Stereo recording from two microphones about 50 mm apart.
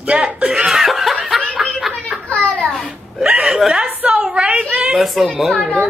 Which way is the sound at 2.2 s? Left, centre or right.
Left.